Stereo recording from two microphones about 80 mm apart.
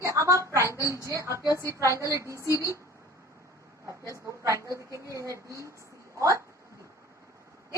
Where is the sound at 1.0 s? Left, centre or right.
Right.